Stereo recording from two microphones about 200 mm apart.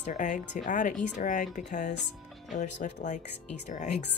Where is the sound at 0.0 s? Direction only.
40° left (ahead or behind).